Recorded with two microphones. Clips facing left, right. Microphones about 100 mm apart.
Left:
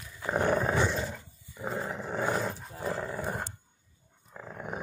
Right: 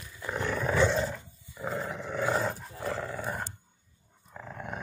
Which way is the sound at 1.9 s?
35° left (ahead or behind).